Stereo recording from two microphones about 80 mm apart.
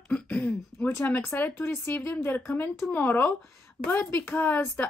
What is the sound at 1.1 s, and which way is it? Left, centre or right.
Speech, left.